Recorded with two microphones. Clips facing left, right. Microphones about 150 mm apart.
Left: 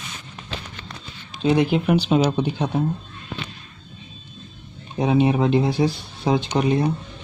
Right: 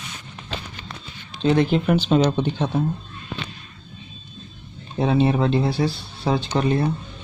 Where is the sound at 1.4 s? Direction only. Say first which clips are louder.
Even; 10° left (ahead or behind).